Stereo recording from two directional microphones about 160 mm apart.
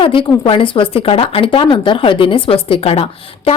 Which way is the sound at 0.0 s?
35° left (ahead or behind).